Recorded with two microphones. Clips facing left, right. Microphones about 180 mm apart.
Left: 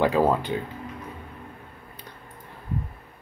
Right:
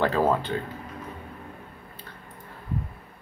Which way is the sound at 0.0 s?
15° left (ahead or behind).